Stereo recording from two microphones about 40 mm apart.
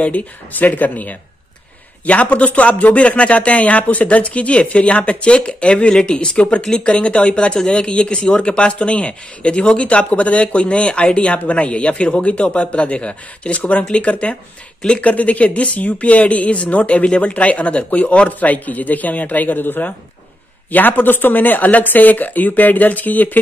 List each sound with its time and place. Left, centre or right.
0.5 s speech: left
20.7 s speech: left